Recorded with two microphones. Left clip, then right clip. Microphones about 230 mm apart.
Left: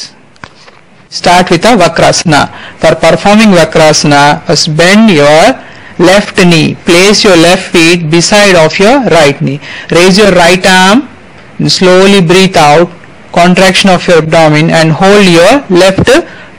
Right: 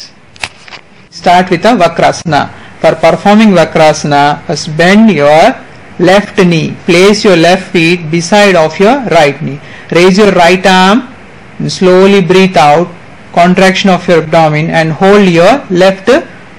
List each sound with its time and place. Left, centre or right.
1.2 s a man's voice: left